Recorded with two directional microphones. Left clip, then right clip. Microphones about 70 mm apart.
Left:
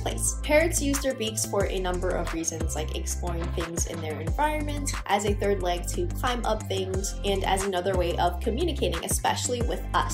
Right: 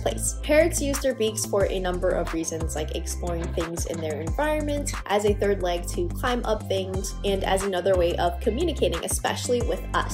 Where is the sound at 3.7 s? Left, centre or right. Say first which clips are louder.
Right 3 dB; right.